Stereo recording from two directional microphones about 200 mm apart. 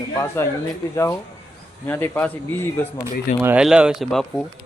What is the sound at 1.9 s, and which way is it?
Speech, 10° left (ahead or behind).